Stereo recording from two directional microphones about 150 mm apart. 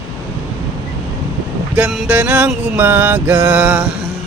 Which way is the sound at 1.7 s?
5° right (ahead or behind).